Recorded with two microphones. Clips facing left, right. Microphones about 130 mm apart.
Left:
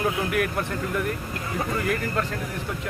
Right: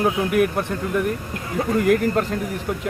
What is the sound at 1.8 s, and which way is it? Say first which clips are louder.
Speech: right 11 dB; 45° right (ahead or behind).